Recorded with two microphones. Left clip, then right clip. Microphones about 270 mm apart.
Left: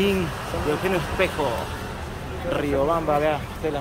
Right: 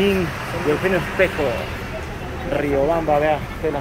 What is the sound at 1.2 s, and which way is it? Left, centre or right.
Speech, centre.